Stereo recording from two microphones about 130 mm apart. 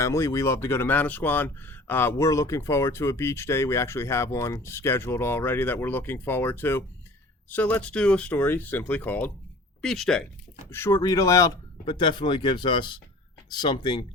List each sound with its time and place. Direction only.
0.0 s speech: 20° left (ahead or behind)
9.8 s speech: 5° left (ahead or behind)
10.7 s speech: 20° left (ahead or behind)
11.9 s speech: 40° left (ahead or behind)